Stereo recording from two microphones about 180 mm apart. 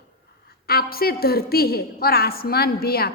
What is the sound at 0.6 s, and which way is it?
A woman's voice, 55° left (ahead or behind).